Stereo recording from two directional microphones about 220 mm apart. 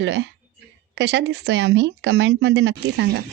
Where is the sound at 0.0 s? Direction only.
50° right (ahead or behind).